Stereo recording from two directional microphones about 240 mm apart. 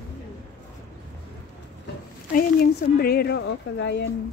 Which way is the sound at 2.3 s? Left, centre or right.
Left.